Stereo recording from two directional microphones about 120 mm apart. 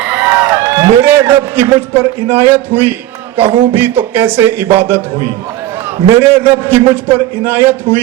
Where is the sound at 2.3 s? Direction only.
20° right (ahead or behind).